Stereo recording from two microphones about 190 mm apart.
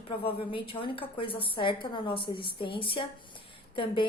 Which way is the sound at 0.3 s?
30° left (ahead or behind).